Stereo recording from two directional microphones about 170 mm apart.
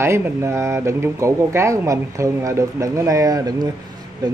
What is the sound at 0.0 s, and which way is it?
Speech, 15° right (ahead or behind).